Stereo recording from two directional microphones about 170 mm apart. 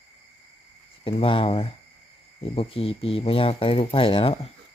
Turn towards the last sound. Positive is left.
turn(degrees=30)  # may be behind; listen again after turning